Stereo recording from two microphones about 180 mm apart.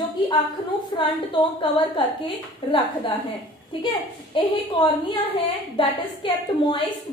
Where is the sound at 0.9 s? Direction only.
25° left (ahead or behind).